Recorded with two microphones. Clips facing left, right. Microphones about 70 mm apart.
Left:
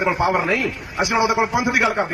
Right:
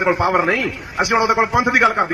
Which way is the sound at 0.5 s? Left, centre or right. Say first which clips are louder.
Right 2 dB; right.